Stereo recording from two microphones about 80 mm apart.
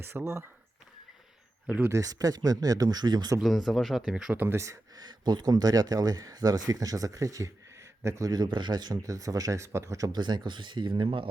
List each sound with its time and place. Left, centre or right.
0.0 s speech: right
1.9 s speech: right
3.4 s speech: centre
4.4 s speech: right
4.9 s speech: right
8.3 s speech: right
9.0 s speech: right
10.1 s speech: right